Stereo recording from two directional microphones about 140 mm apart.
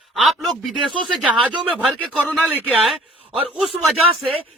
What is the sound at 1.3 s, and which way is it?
Speech, 35° right (ahead or behind).